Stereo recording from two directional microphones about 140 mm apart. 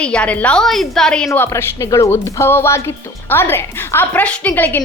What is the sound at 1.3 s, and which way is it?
A woman's voice, 20° left (ahead or behind).